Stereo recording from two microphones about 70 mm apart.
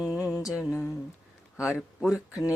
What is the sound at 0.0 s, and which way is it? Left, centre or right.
Music, centre.